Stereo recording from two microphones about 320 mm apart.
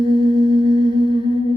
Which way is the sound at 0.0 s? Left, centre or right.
Centre.